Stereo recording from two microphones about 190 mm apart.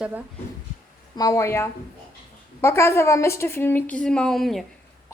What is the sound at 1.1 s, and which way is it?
A woman's voice, 20° left (ahead or behind).